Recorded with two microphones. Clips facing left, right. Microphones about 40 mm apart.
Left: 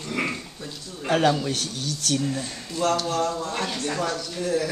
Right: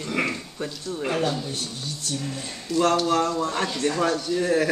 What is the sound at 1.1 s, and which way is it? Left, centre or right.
Speech, left.